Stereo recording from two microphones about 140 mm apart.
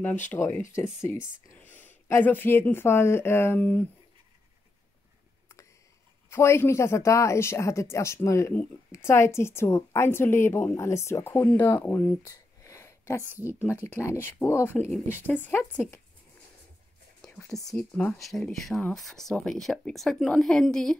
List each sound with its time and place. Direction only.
0.3 s speech: 15° left (ahead or behind)
6.3 s speech: 20° left (ahead or behind)
12.3 s a sound: 20° left (ahead or behind)
13.2 s a woman's voice: 15° right (ahead or behind)
13.8 s speech: 15° left (ahead or behind)
17.5 s speech: centre (ahead or behind)